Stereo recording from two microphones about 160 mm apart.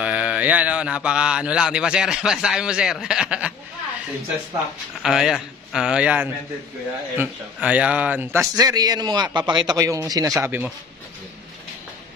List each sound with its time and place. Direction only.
0.0 s speech: 5° right (ahead or behind)
5.0 s a man's voice: 5° right (ahead or behind)